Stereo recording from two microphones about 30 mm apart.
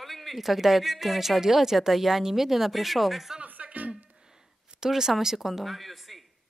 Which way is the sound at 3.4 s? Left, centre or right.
Right.